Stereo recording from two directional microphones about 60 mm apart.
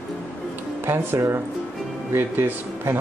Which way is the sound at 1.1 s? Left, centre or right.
Right.